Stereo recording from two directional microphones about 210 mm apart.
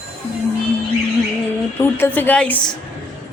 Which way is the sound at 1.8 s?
10° left (ahead or behind).